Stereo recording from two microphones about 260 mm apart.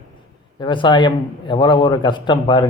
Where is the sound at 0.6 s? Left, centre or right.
Centre.